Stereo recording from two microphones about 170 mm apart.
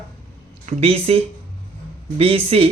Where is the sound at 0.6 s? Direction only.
35° right (ahead or behind).